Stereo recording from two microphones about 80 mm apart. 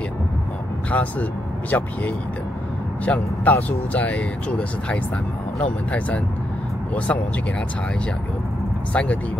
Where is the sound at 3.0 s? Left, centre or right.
Centre.